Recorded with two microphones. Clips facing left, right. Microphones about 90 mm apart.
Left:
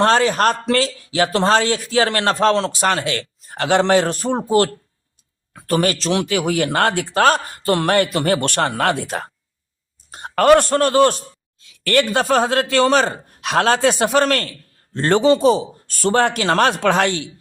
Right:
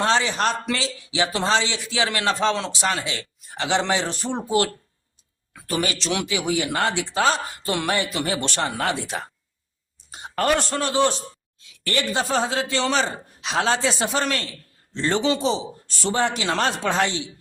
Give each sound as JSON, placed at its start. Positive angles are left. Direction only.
{"t": 0.0, "sound": "a man's voice", "side_deg": 50}
{"t": 6.2, "sound": "a man's voice", "side_deg": 50}
{"t": 10.1, "sound": "a sound", "side_deg": 50}
{"t": 10.3, "sound": "a man's voice", "side_deg": 75}
{"t": 11.8, "sound": "a man's voice", "side_deg": 60}